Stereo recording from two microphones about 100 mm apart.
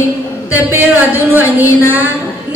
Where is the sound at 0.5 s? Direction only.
20° right (ahead or behind).